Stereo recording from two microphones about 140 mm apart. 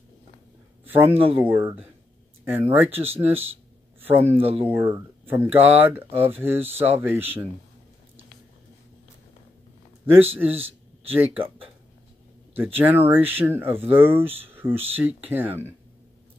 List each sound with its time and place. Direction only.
0.8 s speech: 15° right (ahead or behind)
4.4 s speech: 45° right (ahead or behind)
4.6 s speech: 15° right (ahead or behind)
10.1 s speech: 10° right (ahead or behind)
12.5 s speech: 15° right (ahead or behind)